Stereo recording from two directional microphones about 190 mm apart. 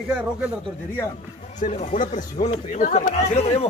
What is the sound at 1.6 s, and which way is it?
Speech, 40° left (ahead or behind).